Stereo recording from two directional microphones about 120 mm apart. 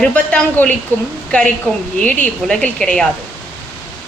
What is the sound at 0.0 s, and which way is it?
A woman's voice, 10° left (ahead or behind).